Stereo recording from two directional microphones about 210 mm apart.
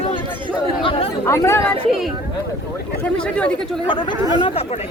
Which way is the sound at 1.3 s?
10° left (ahead or behind).